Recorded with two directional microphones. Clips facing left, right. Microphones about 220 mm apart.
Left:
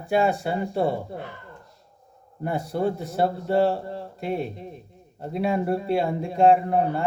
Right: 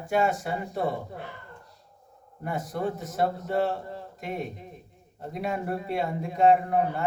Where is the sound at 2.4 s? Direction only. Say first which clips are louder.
Left 5 dB; 30° left (ahead or behind).